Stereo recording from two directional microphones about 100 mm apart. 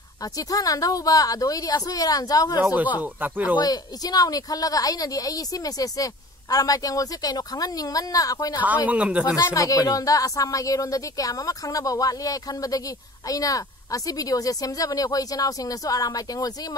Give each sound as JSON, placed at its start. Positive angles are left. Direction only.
{"t": 0.2, "sound": "speech", "side_deg": 40}
{"t": 2.6, "sound": "speech", "side_deg": -15}
{"t": 3.5, "sound": "speech", "side_deg": 40}
{"t": 8.6, "sound": "speech", "side_deg": -15}
{"t": 9.2, "sound": "speech", "side_deg": 35}